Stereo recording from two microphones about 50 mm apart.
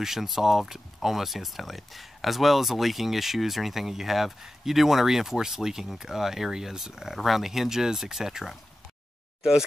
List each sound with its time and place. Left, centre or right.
0.0 s speech: centre